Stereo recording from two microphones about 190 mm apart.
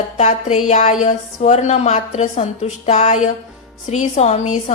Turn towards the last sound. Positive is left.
turn(degrees=35)  # may be behind; listen again after turning